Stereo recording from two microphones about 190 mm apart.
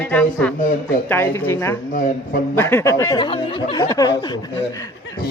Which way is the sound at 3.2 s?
30° left (ahead or behind).